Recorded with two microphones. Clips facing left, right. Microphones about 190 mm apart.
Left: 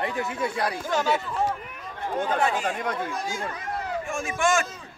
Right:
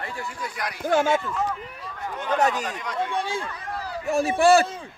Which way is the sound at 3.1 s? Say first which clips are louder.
Right 3 dB; 30° right (ahead or behind).